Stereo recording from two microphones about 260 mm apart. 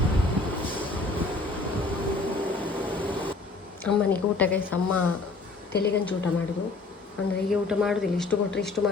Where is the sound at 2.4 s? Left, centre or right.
Centre.